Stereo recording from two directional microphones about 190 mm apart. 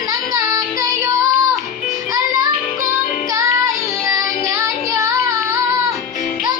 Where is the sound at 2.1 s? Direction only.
20° right (ahead or behind).